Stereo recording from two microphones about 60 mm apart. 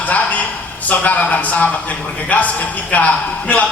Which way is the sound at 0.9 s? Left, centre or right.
Left.